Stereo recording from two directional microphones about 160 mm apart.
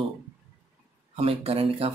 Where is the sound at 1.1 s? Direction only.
35° right (ahead or behind).